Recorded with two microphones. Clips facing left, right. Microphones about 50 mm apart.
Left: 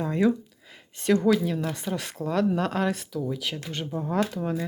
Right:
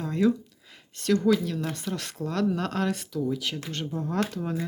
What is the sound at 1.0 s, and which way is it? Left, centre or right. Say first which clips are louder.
Speech: left 1 dB; left.